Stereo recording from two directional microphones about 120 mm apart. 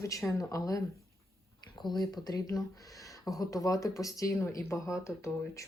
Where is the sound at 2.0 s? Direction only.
35° left (ahead or behind).